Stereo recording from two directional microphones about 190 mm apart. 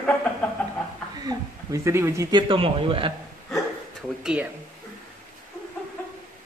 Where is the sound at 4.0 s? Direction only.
5° right (ahead or behind).